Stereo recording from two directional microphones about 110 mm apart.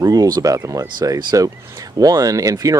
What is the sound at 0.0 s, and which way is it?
Speech, 35° right (ahead or behind).